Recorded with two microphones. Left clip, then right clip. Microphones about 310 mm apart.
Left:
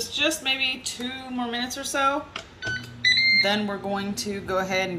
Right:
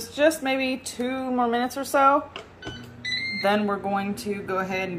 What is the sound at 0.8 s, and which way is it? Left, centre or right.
Speech, centre.